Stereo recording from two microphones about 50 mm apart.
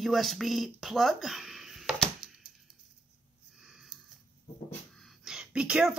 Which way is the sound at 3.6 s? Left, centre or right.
Centre.